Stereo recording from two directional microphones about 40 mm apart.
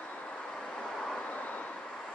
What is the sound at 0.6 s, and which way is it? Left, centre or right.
Vehicle, centre.